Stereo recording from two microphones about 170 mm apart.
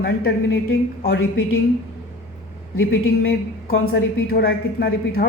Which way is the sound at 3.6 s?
65° left (ahead or behind).